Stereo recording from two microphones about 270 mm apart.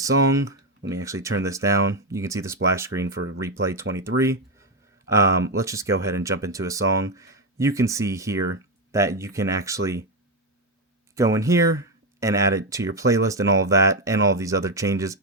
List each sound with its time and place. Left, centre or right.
0.0 s speech: centre
11.1 s speech: centre